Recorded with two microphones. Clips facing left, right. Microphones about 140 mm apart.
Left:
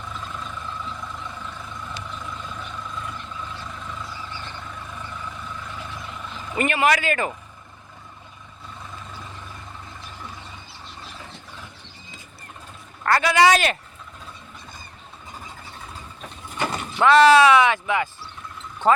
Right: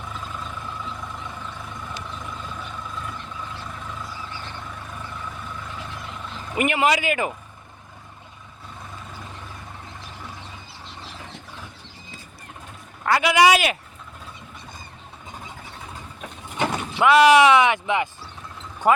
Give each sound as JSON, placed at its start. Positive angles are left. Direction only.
{"t": 0.0, "sound": "vehicle", "side_deg": -10}
{"t": 6.5, "sound": "speech", "side_deg": -15}
{"t": 13.1, "sound": "speech", "side_deg": -10}
{"t": 16.6, "sound": "speech", "side_deg": -10}